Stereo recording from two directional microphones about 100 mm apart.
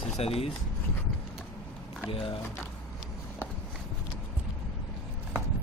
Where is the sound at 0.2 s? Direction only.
80° left.